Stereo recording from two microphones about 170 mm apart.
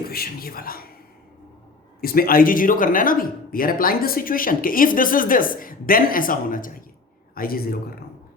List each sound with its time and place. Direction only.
0.1 s whispering: 60° left (ahead or behind)
2.0 s speech: 60° left (ahead or behind)